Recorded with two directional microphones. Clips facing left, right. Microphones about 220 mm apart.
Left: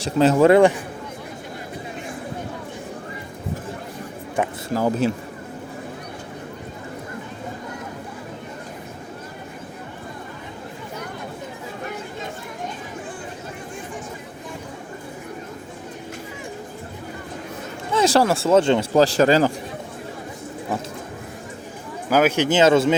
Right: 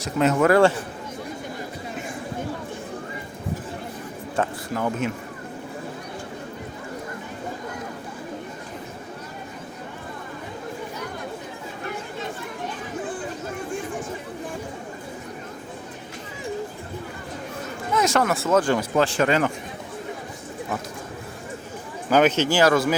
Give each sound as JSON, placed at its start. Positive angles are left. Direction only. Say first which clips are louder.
{"t": 0.0, "sound": "speech", "louder": "left 4 dB", "side_deg": 30}
{"t": 4.4, "sound": "speech", "louder": "left 1 dB", "side_deg": 15}
{"t": 4.7, "sound": "speech", "louder": "left 7 dB", "side_deg": 35}
{"t": 17.9, "sound": "speech", "louder": "left 4 dB", "side_deg": 30}
{"t": 22.1, "sound": "speech", "louder": "left 1 dB", "side_deg": 10}